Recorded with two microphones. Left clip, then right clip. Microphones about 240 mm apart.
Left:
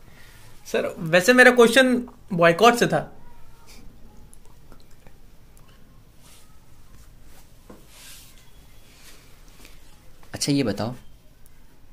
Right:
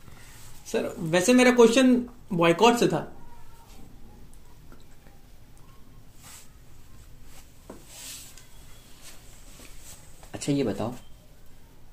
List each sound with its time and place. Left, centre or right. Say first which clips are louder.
0.7 s speech: left 5 dB; left
10.3 s speech: left 4 dB; left